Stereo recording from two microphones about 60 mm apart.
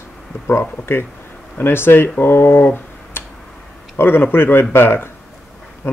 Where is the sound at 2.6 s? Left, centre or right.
Left.